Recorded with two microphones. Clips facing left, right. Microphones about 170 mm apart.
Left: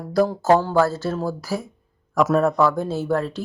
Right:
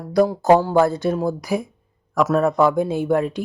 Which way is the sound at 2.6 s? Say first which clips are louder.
Right 3 dB; 15° right (ahead or behind).